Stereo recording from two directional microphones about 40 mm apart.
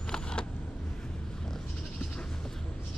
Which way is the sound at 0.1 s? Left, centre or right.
Left.